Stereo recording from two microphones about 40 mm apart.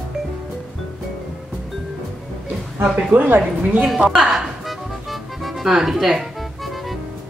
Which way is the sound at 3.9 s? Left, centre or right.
Centre.